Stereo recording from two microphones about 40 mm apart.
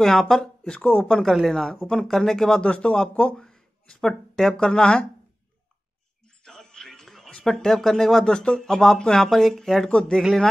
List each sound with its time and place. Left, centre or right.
0.0 s speech: centre
0.7 s speech: left
1.1 s speech: centre
2.6 s speech: left
3.3 s a sound: centre
4.6 s speech: left
6.4 s music: centre
7.4 s speech: centre
8.3 s speech: left
8.5 s speech: centre
9.8 s speech: left